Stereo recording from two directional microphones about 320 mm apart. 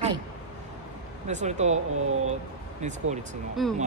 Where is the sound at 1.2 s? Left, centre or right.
Right.